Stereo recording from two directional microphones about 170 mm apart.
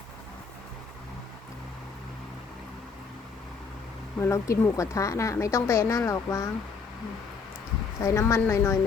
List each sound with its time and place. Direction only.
4.2 s a woman's voice: 15° left (ahead or behind)
8.0 s a woman's voice: 15° left (ahead or behind)